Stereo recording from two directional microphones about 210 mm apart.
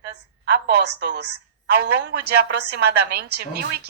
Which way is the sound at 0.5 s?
50° right (ahead or behind).